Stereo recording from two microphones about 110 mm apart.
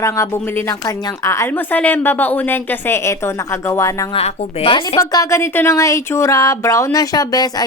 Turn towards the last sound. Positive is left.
turn(degrees=35)  # may be behind; listen again after turning